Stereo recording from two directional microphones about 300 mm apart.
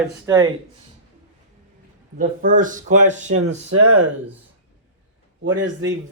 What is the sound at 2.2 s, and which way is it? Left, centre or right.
Speech, right.